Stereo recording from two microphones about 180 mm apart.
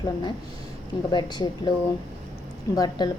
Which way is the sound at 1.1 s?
25° left (ahead or behind).